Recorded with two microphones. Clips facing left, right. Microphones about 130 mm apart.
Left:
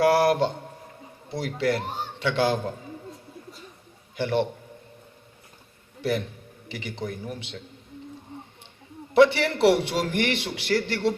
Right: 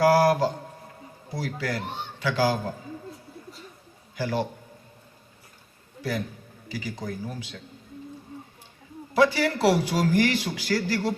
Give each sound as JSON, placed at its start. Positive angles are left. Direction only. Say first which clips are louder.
{"t": 0.1, "sound": "a sound", "louder": "even", "side_deg": 25}
{"t": 1.3, "sound": "a man's voice", "louder": "left 5 dB", "side_deg": 25}
{"t": 4.1, "sound": "a man's voice", "louder": "left 3 dB", "side_deg": 25}
{"t": 6.7, "sound": "speech", "louder": "even", "side_deg": 25}
{"t": 9.1, "sound": "speech", "louder": "left 3 dB", "side_deg": 25}